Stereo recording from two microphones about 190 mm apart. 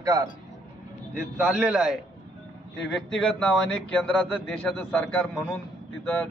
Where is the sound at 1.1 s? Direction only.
5° right (ahead or behind).